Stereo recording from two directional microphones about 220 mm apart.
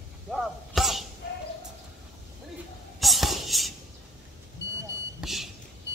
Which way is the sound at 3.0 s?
Centre (ahead or behind).